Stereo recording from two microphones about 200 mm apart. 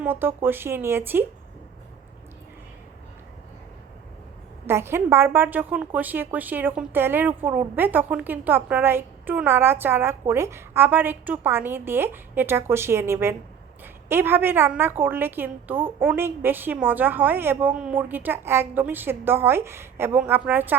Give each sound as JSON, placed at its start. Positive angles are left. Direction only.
{"t": 0.0, "sound": "a woman's voice", "side_deg": -10}
{"t": 4.6, "sound": "a woman's voice", "side_deg": -10}